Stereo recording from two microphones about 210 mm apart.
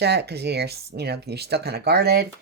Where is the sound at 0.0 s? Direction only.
50° right (ahead or behind).